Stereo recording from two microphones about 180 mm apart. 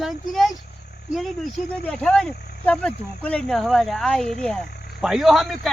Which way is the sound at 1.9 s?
5° left (ahead or behind).